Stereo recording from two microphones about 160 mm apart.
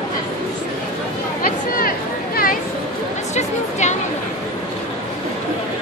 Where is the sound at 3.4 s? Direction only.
45° left (ahead or behind).